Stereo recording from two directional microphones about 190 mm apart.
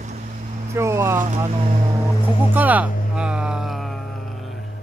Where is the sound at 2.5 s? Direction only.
10° right (ahead or behind).